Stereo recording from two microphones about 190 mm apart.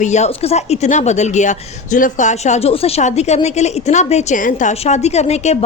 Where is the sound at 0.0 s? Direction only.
35° left (ahead or behind).